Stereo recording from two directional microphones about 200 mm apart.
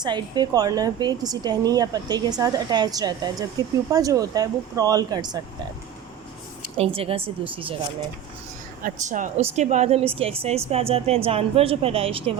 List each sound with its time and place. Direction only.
0.0 s a woman's voice: 20° right (ahead or behind)
6.7 s a woman's voice: 30° right (ahead or behind)
8.8 s a woman's voice: 40° right (ahead or behind)